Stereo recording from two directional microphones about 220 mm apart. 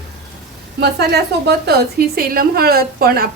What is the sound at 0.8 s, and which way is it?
A woman's voice, 50° right (ahead or behind).